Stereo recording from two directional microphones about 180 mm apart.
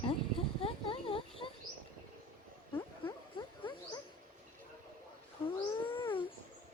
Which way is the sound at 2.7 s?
30° left (ahead or behind).